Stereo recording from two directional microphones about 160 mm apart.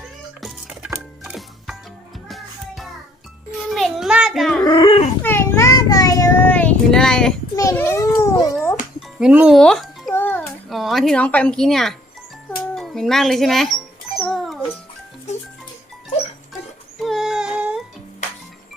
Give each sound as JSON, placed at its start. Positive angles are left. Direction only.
{"t": 0.4, "sound": "music", "side_deg": 0}
{"t": 3.7, "sound": "a sound", "side_deg": 0}
{"t": 4.6, "sound": "dog", "side_deg": 30}
{"t": 5.2, "sound": "child singing", "side_deg": 15}
{"t": 7.5, "sound": "babbling", "side_deg": 20}
{"t": 9.1, "sound": "speech", "side_deg": -5}
{"t": 9.6, "sound": "music", "side_deg": 5}
{"t": 10.2, "sound": "music", "side_deg": 10}
{"t": 10.4, "sound": "speech", "side_deg": 0}
{"t": 14.2, "sound": "music", "side_deg": 0}
{"t": 15.3, "sound": "music", "side_deg": 45}
{"t": 17.0, "sound": "a sound", "side_deg": 0}